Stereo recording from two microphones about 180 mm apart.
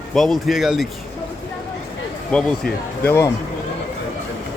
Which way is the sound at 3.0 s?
15° left (ahead or behind).